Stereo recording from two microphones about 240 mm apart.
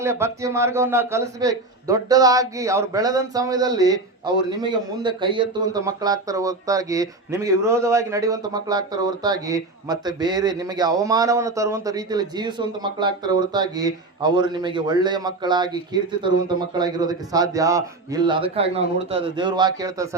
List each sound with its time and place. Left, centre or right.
0.0 s a man's voice: centre